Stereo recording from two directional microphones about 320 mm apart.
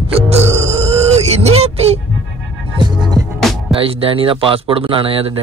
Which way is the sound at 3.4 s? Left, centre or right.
Centre.